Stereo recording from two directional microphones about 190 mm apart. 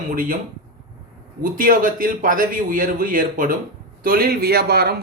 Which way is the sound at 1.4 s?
45° right (ahead or behind).